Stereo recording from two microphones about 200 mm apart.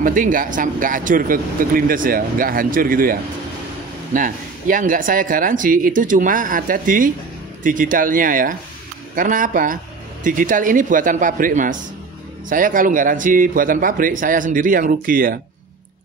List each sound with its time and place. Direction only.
0.0 s a man's voice: 45° right (ahead or behind)